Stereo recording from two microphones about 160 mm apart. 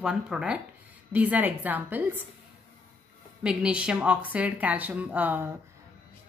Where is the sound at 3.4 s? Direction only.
5° right (ahead or behind).